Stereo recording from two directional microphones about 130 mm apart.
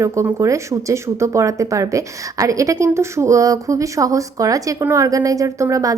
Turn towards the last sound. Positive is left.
turn(degrees=-25)  # may be behind; listen again after turning